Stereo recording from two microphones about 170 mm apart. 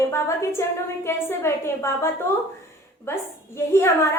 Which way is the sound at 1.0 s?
15° left (ahead or behind).